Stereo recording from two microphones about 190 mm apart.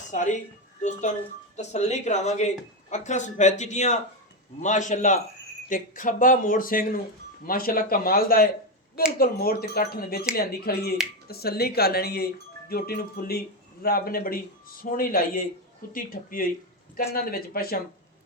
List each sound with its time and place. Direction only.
0.1 s speech: 40° left (ahead or behind)